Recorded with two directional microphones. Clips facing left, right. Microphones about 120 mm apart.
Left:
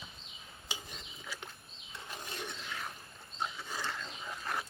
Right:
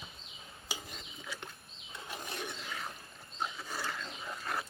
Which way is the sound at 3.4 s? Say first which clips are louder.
Even; 5° right (ahead or behind).